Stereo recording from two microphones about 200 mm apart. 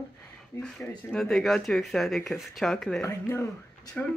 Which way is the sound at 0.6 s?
5° left (ahead or behind).